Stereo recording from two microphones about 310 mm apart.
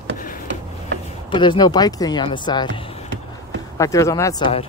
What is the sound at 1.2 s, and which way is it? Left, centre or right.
Speech, centre.